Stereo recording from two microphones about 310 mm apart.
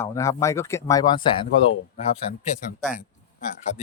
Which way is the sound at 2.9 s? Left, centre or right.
Left.